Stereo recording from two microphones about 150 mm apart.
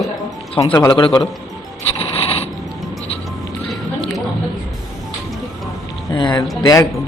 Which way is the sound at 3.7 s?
Centre (ahead or behind).